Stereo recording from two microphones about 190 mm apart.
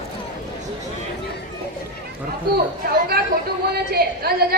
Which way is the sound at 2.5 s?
55° right (ahead or behind).